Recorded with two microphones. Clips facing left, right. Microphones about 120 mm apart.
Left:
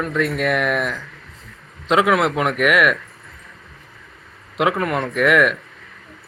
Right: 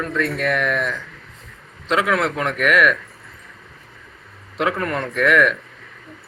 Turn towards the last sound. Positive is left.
turn(degrees=15)  # may be behind; listen again after turning